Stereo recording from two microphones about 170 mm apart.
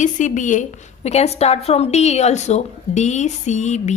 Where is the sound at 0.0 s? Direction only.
45° left (ahead or behind).